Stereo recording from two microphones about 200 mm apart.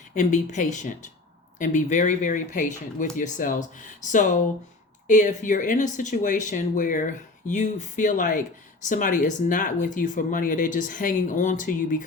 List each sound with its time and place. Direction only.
0.1 s speech: 35° left (ahead or behind)